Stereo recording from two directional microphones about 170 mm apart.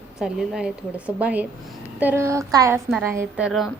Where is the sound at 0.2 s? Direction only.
5° right (ahead or behind).